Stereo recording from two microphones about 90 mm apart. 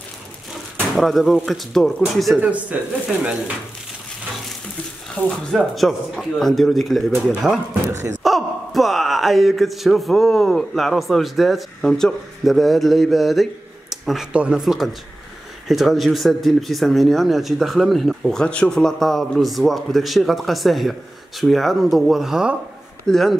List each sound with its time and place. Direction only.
0.9 s speech: centre (ahead or behind)
2.4 s speech: 15° right (ahead or behind)
5.2 s speech: 20° left (ahead or behind)
5.5 s speech: centre (ahead or behind)
8.2 s a sound: centre (ahead or behind)
14.3 s speech: 15° right (ahead or behind)
14.6 s speech: centre (ahead or behind)